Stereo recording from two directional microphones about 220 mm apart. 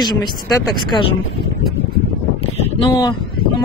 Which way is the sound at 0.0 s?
20° left (ahead or behind).